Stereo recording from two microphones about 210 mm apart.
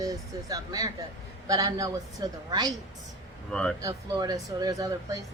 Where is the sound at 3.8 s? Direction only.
15° right (ahead or behind).